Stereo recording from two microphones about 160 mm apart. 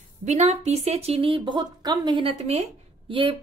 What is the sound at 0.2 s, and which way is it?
Speech, 45° right (ahead or behind).